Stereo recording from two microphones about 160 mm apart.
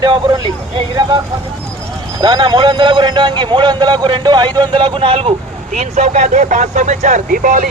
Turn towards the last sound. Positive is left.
turn(degrees=-55)  # may be behind; listen again after turning